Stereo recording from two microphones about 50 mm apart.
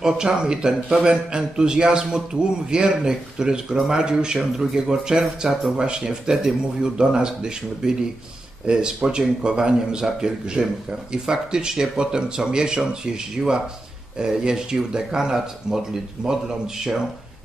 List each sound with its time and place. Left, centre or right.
0.0 s a man's voice: centre